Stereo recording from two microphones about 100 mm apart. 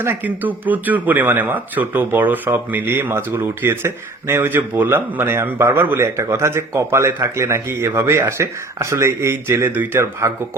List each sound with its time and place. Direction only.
0.0 s speech: 20° right (ahead or behind)